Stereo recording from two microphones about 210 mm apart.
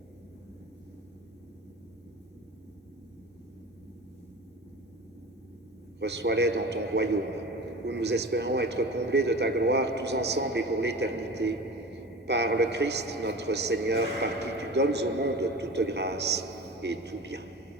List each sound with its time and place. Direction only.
6.0 s a man's voice: 55° right (ahead or behind)